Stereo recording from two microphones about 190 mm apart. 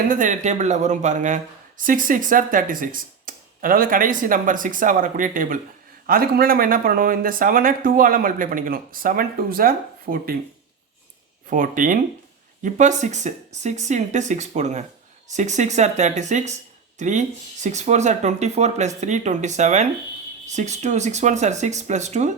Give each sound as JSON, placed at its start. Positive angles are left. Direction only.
{"t": 0.1, "sound": "speech", "side_deg": -40}
{"t": 11.4, "sound": "speech", "side_deg": -45}